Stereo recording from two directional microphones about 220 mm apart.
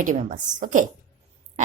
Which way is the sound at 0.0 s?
35° right (ahead or behind).